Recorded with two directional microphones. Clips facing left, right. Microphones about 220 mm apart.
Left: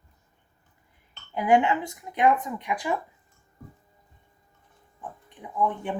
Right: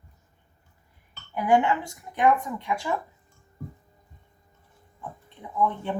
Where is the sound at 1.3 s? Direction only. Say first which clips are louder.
Left 1 dB; 20° left (ahead or behind).